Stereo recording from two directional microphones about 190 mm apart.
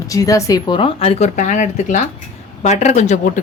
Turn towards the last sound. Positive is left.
turn(degrees=40)  # may be behind; listen again after turning